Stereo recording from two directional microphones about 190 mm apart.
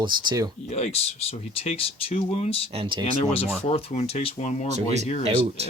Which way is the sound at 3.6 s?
30° left (ahead or behind).